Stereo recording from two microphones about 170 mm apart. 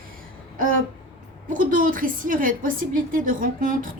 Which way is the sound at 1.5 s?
50° right (ahead or behind).